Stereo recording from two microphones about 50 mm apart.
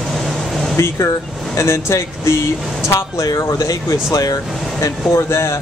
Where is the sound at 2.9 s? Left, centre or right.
Left.